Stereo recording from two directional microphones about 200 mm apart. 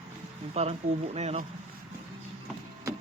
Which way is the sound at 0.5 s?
30° right (ahead or behind).